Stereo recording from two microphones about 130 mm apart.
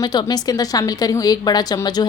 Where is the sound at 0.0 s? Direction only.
35° left (ahead or behind).